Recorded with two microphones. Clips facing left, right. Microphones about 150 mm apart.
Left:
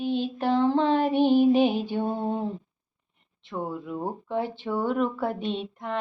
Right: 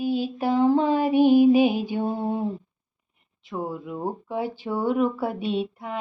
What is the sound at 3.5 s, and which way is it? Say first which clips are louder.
Speech: right 1 dB; 10° right (ahead or behind).